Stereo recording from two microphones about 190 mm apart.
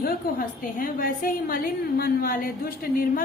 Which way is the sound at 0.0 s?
50° left (ahead or behind).